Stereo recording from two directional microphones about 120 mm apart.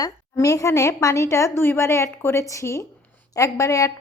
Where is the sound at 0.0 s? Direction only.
30° left (ahead or behind).